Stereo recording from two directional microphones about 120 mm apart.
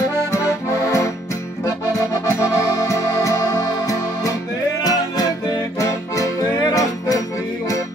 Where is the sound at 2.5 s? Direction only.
25° left (ahead or behind).